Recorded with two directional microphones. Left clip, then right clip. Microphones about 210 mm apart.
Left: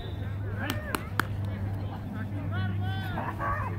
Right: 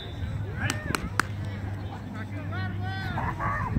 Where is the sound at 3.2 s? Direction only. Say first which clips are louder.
Right 1 dB; 25° left (ahead or behind).